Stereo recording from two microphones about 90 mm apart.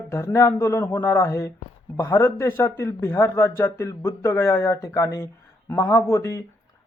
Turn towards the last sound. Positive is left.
turn(degrees=30)  # may be behind; listen again after turning